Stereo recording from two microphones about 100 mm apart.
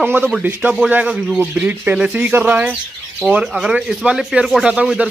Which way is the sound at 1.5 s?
15° right (ahead or behind).